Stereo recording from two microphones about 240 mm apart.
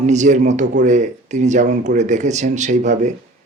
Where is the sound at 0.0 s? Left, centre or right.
Right.